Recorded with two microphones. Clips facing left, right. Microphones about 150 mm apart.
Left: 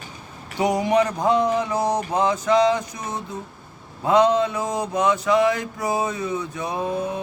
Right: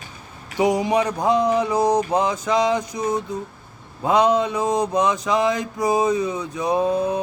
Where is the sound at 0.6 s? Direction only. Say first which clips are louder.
Right 1 dB; 15° right (ahead or behind).